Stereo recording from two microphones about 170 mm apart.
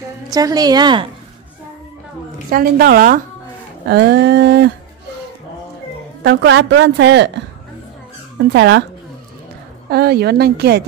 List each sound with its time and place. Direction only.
0.3 s a woman's voice: 20° right (ahead or behind)
2.5 s a woman's voice: 60° right (ahead or behind)
3.8 s a woman's voice: 80° right
6.2 s a woman's voice: 85° right
8.4 s speech: 80° right
9.8 s a woman's voice: 70° right (ahead or behind)